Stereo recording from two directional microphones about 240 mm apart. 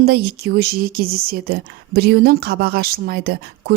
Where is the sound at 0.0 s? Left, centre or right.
Right.